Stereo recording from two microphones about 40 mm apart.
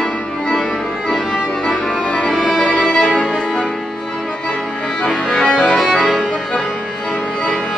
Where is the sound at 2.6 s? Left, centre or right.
Left.